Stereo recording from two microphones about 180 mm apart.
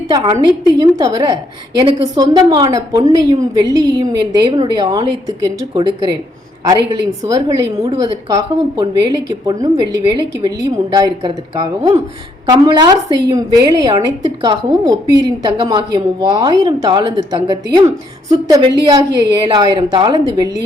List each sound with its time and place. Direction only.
0.1 s a woman's voice: 20° right (ahead or behind)